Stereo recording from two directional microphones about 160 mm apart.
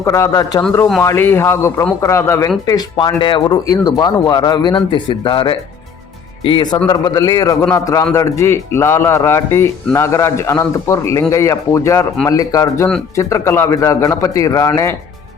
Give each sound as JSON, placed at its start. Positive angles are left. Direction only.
{"t": 0.0, "sound": "a man's voice", "side_deg": 20}